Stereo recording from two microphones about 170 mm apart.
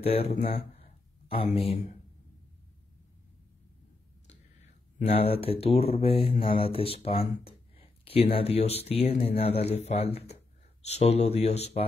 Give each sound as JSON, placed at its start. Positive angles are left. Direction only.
{"t": 0.0, "sound": "speech", "side_deg": 35}
{"t": 4.9, "sound": "speech", "side_deg": 40}